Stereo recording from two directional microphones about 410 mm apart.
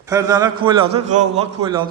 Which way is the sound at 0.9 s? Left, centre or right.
Right.